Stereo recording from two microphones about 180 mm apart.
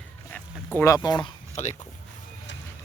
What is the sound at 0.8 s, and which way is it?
Speech, 20° left (ahead or behind).